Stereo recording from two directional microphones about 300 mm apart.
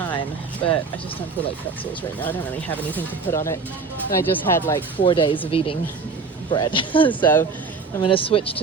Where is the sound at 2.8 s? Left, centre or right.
Centre.